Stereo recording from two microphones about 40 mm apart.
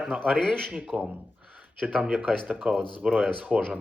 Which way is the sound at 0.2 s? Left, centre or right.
Centre.